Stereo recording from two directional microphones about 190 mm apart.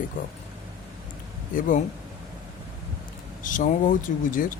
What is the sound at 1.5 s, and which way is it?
Speech, 45° left (ahead or behind).